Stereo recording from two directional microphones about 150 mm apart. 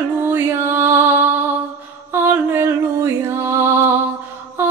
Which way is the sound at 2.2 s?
15° right (ahead or behind).